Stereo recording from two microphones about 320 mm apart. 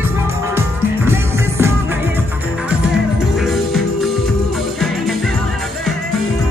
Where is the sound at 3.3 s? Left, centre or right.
Centre.